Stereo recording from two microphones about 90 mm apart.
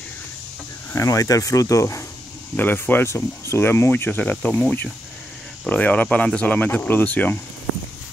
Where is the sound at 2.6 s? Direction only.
20° left (ahead or behind).